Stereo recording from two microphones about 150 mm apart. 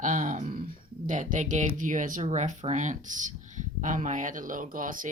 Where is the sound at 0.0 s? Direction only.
55° right (ahead or behind).